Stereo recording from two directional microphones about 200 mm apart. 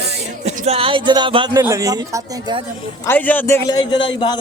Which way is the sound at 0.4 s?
30° right (ahead or behind).